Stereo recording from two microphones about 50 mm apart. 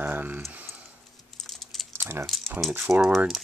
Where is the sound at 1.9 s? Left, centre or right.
Right.